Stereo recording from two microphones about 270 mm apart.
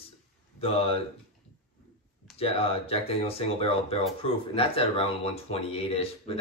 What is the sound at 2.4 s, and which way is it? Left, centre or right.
Speech, left.